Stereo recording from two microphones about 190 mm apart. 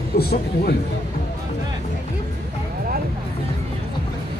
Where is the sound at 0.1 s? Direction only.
55° left (ahead or behind).